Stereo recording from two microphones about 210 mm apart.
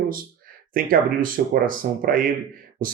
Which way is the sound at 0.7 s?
40° right (ahead or behind).